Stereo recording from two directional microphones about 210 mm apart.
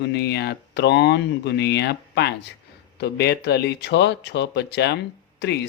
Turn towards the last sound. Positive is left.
turn(degrees=50)  # may be behind; listen again after turning